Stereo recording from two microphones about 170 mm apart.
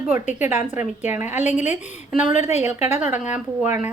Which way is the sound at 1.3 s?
45° left (ahead or behind).